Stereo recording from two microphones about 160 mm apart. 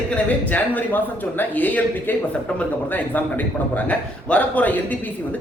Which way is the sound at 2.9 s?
10° left (ahead or behind).